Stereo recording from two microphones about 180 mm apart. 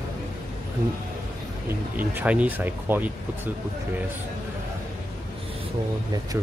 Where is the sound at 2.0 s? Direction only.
10° right (ahead or behind).